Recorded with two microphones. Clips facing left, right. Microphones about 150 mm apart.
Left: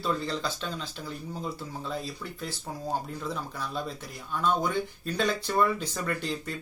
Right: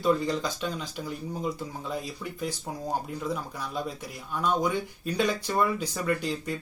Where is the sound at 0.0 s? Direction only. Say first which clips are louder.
Right 5 dB; 15° right (ahead or behind).